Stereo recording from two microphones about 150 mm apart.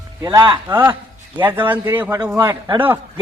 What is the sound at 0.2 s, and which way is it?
Speech, 25° right (ahead or behind).